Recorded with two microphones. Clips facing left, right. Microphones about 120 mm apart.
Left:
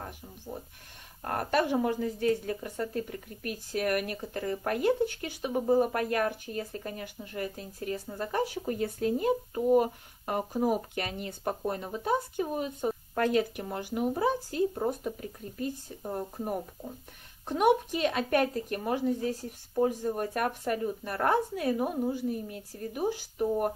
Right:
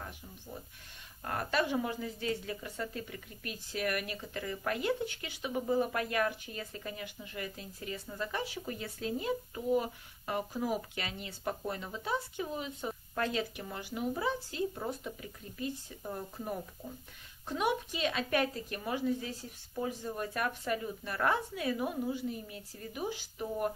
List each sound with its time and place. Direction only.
1.2 s a woman's voice: 45° left (ahead or behind)